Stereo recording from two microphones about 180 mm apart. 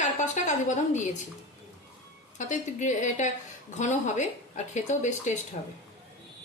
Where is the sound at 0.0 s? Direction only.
40° left (ahead or behind).